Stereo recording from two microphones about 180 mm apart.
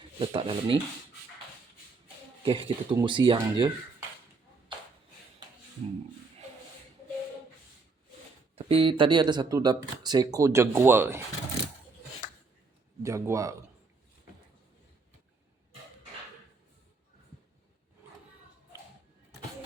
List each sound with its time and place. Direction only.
0.2 s speech: 30° right (ahead or behind)
2.4 s speech: 30° right (ahead or behind)
8.5 s speech: 30° right (ahead or behind); by 11.2 s 15° right (ahead or behind)
13.0 s speech: 15° right (ahead or behind)